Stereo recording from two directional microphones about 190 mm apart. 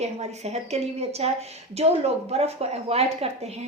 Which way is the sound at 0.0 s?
35° right (ahead or behind).